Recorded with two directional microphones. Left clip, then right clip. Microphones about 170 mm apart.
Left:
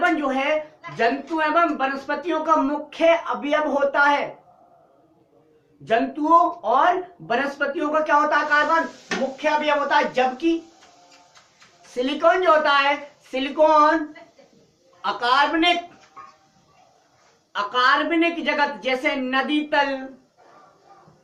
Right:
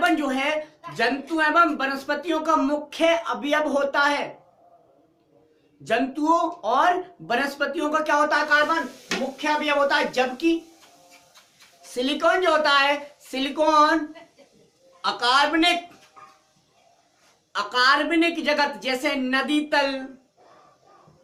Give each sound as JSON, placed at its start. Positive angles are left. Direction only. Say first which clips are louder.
{"t": 0.0, "sound": "a sound", "louder": "left 1 dB", "side_deg": -30}
{"t": 1.4, "sound": "speech", "louder": "right 1 dB", "side_deg": -30}
{"t": 5.8, "sound": "a woman's voice", "louder": "left 2 dB", "side_deg": -30}
{"t": 11.9, "sound": "a woman's voice", "louder": "left 2 dB", "side_deg": -25}
{"t": 15.0, "sound": "a woman's voice", "louder": "left 1 dB", "side_deg": -30}
{"t": 17.5, "sound": "a woman's voice", "louder": "left 1 dB", "side_deg": -35}